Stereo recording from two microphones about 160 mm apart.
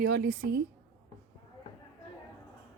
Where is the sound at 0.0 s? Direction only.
70° right (ahead or behind).